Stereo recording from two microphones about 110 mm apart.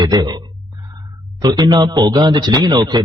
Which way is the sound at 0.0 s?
40° right (ahead or behind).